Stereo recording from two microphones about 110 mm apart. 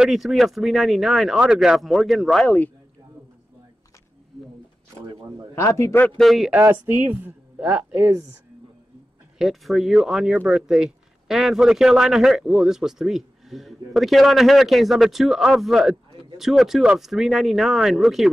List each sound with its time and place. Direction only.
0.0 s a man's voice: centre (ahead or behind)
2.4 s speech: 15° left (ahead or behind)
5.5 s a man's voice: 25° left (ahead or behind)
6.1 s a man's voice: centre (ahead or behind)
6.7 s speech: 15° right (ahead or behind)
8.1 s speech: 30° right (ahead or behind)
9.4 s a man's voice: centre (ahead or behind)